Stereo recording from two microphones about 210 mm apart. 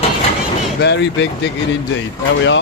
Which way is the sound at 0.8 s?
55° left (ahead or behind).